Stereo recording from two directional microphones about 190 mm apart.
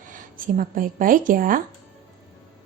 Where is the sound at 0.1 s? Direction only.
45° right (ahead or behind).